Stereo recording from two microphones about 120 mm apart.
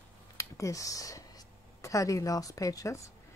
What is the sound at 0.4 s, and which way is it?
Speech, 25° left (ahead or behind).